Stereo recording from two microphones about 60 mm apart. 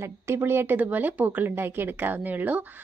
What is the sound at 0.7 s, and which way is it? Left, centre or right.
Speech, right.